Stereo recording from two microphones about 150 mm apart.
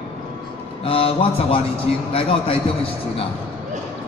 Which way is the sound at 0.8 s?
40° left (ahead or behind).